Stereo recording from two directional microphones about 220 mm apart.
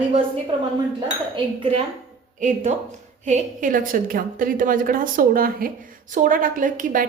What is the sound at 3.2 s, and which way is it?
A woman's voice, 35° right (ahead or behind).